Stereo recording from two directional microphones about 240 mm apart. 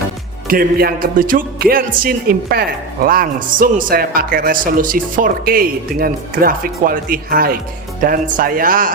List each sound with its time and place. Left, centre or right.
0.4 s music: right